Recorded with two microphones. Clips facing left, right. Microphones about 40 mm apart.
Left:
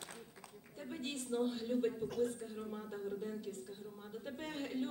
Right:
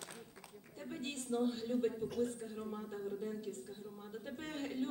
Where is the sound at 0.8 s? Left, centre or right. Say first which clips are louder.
Even; centre.